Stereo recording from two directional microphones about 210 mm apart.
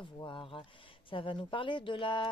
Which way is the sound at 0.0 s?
25° left (ahead or behind).